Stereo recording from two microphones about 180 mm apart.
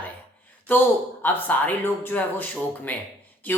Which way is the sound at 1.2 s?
10° left (ahead or behind).